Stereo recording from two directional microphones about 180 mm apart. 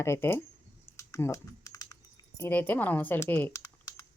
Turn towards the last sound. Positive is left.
turn(degrees=20)  # may be behind; listen again after turning